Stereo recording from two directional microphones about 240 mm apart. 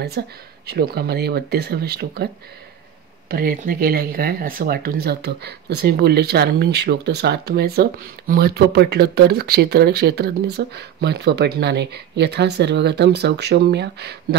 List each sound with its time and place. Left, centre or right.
0.2 s speech: right
3.3 s speech: right